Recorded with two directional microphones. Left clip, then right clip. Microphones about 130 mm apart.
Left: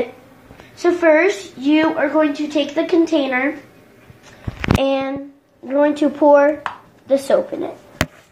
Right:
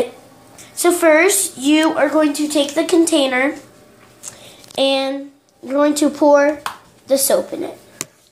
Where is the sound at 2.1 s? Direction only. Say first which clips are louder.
Right 1 dB; 40° right (ahead or behind).